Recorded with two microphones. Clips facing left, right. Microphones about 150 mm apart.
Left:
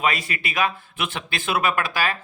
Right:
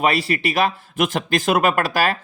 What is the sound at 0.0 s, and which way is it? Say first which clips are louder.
Speech: right 6 dB; 35° right (ahead or behind).